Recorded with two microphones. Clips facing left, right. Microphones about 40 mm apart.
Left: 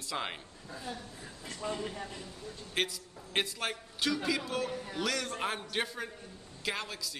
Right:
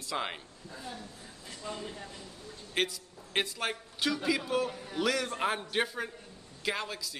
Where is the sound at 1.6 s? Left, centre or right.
Left.